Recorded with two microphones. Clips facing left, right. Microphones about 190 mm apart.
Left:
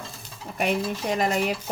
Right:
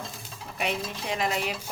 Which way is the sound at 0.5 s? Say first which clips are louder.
Left 6 dB; 45° left (ahead or behind).